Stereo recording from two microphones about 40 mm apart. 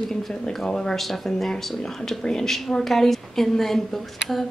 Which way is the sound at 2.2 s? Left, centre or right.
Centre.